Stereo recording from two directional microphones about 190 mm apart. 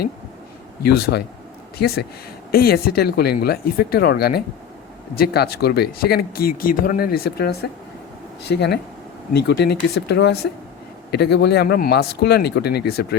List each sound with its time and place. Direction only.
0.8 s speech: 55° left (ahead or behind)
2.5 s speech: 55° left (ahead or behind)